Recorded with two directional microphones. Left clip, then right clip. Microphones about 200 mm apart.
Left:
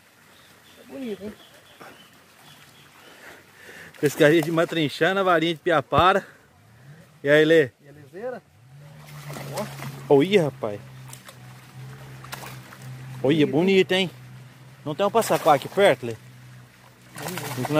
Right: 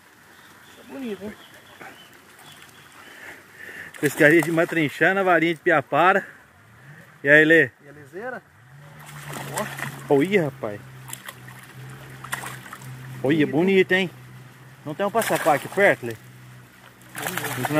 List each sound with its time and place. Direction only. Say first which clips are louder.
4.2 s speech: right 2 dB; 15° left (ahead or behind)
7.2 s speech: right 2 dB; 10° left (ahead or behind)
9.3 s a sound: right 3 dB; 10° right (ahead or behind)
10.0 s speech: left 2 dB; 20° left (ahead or behind)
13.2 s speech: even; 15° left (ahead or behind)
15.2 s speech: left 1 dB; 10° left (ahead or behind)
15.8 s speech: even; 20° left (ahead or behind)
17.1 s a sound: right 4 dB; 10° right (ahead or behind)